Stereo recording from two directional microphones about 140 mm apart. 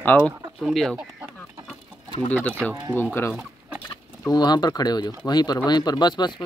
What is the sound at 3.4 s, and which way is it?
Chicken, 10° right (ahead or behind).